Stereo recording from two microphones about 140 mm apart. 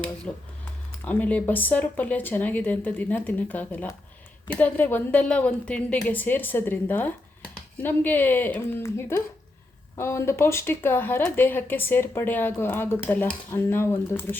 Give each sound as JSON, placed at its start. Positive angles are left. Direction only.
{"t": 0.3, "sound": "speech", "side_deg": 5}